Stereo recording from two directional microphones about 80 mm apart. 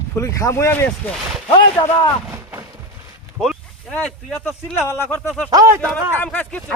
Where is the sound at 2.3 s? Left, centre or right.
Right.